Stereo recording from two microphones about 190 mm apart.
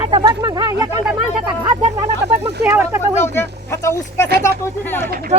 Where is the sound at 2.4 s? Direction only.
15° right (ahead or behind).